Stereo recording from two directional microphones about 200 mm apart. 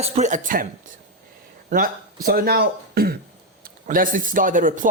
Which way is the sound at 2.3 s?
50° right (ahead or behind).